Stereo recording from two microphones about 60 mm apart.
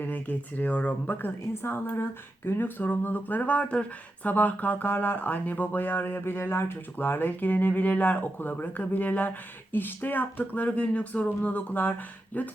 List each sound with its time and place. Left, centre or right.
0.0 s speech: left